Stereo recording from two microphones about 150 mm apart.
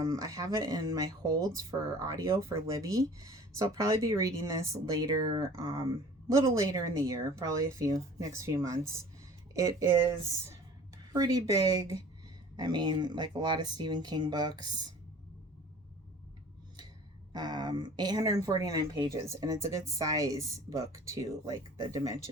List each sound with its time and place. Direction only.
0.0 s speech: 20° right (ahead or behind)
11.1 s speech: 25° right (ahead or behind)
17.3 s speech: 25° right (ahead or behind)